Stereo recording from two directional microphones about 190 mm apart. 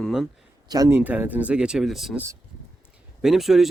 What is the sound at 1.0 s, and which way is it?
Speech, 10° right (ahead or behind).